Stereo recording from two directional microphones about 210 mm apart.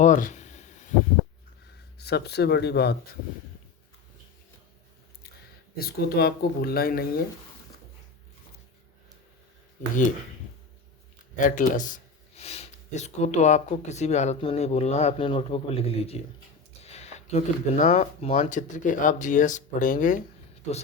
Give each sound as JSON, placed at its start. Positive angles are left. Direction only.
{"t": 0.0, "sound": "a sound", "side_deg": 40}
{"t": 2.0, "sound": "speech", "side_deg": 50}
{"t": 5.7, "sound": "speech", "side_deg": 45}
{"t": 11.3, "sound": "speech", "side_deg": 40}